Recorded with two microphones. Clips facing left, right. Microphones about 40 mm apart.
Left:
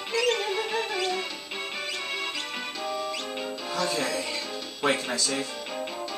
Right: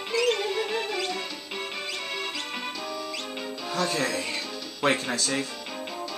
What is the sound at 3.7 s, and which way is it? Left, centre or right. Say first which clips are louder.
Music: right 1 dB; right.